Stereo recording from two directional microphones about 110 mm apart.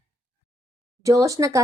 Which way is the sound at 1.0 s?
30° right (ahead or behind).